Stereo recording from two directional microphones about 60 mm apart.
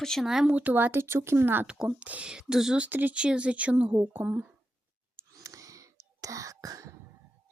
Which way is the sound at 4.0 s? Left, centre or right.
Right.